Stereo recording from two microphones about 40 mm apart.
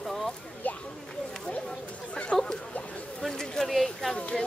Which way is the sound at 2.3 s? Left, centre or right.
Left.